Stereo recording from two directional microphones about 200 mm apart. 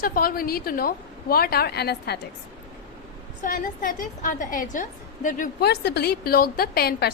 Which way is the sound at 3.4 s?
40° left (ahead or behind).